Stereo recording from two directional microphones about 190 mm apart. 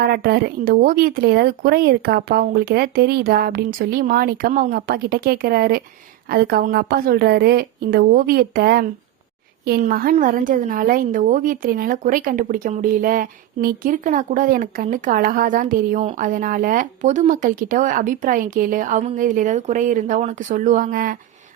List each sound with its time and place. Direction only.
0.0 s a woman's voice: 55° right (ahead or behind)